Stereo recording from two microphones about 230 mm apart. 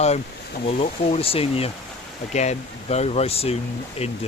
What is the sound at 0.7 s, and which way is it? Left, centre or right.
Speech, left.